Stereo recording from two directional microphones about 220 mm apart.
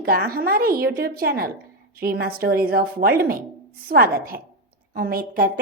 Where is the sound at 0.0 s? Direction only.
40° right (ahead or behind).